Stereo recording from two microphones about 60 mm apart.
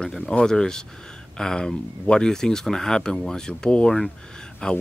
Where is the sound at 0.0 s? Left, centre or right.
Centre.